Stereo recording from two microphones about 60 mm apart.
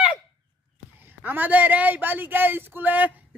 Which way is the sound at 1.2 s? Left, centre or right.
Right.